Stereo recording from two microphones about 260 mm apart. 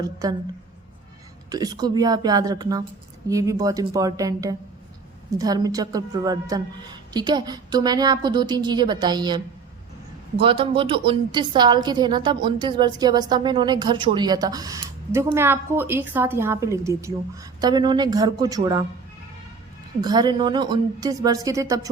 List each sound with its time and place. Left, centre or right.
0.0 s a woman's voice: centre
1.5 s a woman's voice: centre
10.4 s a woman's voice: centre
20.0 s a woman's voice: centre